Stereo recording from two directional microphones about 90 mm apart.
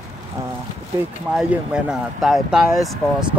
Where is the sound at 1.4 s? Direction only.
10° right (ahead or behind).